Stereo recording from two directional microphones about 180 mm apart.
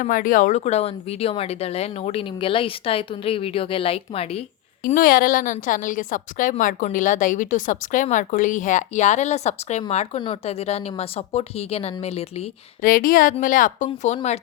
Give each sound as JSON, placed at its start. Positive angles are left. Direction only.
{"t": 0.0, "sound": "speech", "side_deg": 50}
{"t": 4.9, "sound": "a woman's voice", "side_deg": 55}
{"t": 12.8, "sound": "a woman's voice", "side_deg": 50}